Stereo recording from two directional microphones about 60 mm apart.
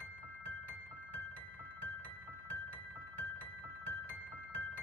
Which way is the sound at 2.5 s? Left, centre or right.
Left.